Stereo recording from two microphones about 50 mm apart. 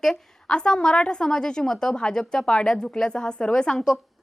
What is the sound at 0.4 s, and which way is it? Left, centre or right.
Speech, centre.